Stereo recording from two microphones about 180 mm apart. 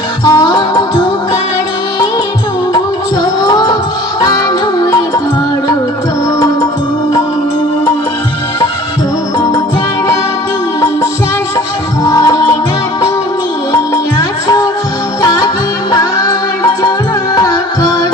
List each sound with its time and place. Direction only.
0.3 s music: 20° left (ahead or behind)
3.4 s music: 20° left (ahead or behind)
4.8 s music: 20° left (ahead or behind)
12.0 s music: 20° left (ahead or behind)
13.9 s music: 20° left (ahead or behind)
17.3 s music: 20° left (ahead or behind)